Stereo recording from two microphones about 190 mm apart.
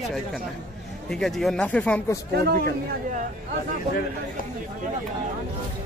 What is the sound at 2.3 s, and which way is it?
Speech, 55° right (ahead or behind).